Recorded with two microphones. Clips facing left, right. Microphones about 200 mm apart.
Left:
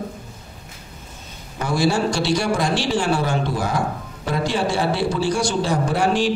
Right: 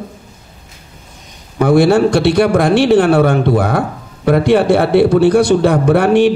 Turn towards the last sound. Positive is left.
turn(degrees=-60)  # may be behind; listen again after turning